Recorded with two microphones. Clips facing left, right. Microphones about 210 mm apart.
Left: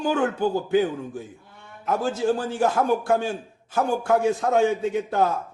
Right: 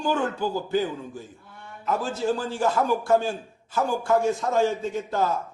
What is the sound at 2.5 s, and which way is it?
A man's voice, 60° left (ahead or behind).